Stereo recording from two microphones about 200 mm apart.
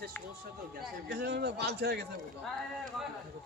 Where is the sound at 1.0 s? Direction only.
55° right (ahead or behind).